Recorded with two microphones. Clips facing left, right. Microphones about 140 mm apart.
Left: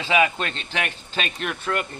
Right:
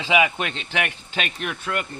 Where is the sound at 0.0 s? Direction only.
15° right (ahead or behind).